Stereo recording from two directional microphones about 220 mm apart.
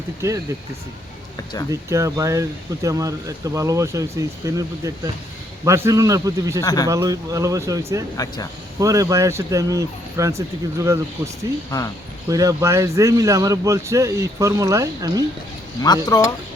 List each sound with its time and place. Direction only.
0.2 s speech: 15° right (ahead or behind)
1.7 s speech: 15° right (ahead or behind)
6.6 s speech: 15° left (ahead or behind)
6.8 s speech: 15° right (ahead or behind)
8.1 s speech: 15° left (ahead or behind)
8.8 s speech: 15° right (ahead or behind)
12.3 s speech: 15° right (ahead or behind)
16.0 s speech: 15° left (ahead or behind)